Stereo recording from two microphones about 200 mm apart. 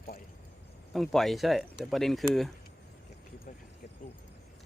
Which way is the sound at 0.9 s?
Centre (ahead or behind).